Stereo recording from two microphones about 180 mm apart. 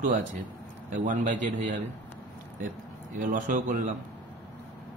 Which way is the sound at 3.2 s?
45° right (ahead or behind).